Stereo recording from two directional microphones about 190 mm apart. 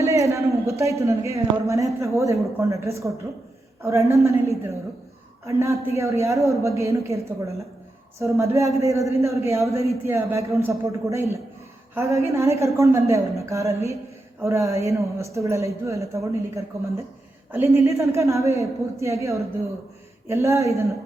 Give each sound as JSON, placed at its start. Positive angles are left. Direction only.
{"t": 0.0, "sound": "a woman's voice", "side_deg": -15}